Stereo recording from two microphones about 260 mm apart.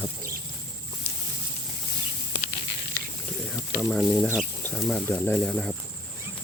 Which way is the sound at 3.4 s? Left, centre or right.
Centre.